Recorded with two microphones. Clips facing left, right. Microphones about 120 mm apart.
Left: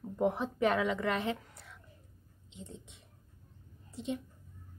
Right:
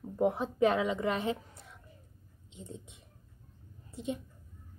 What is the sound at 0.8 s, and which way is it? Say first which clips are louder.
Speech: right 1 dB; 25° right (ahead or behind).